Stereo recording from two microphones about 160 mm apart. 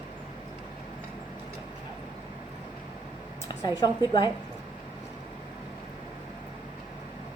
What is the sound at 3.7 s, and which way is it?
Speech, 25° left (ahead or behind).